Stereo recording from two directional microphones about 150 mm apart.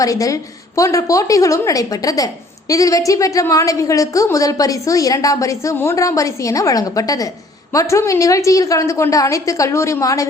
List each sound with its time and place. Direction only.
0.0 s a woman's voice: 20° left (ahead or behind)